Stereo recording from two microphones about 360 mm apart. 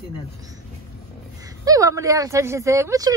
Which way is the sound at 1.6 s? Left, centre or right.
Centre.